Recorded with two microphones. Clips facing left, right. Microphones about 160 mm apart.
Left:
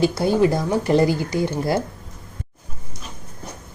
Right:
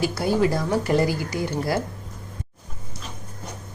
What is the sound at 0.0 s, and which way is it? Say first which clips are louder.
Speech: left 4 dB; 25° left (ahead or behind).